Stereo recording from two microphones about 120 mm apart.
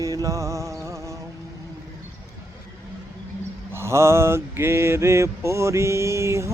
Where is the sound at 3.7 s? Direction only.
20° right (ahead or behind).